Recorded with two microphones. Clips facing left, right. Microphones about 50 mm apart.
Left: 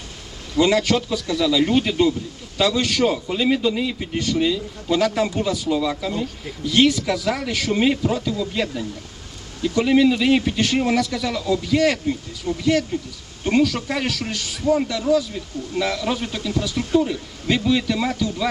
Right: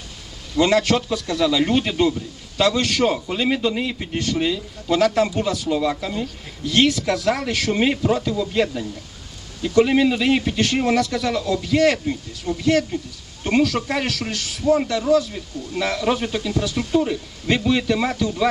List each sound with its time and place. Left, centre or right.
0.5 s a man's voice: centre
4.9 s a man's voice: centre
14.8 s a man's voice: centre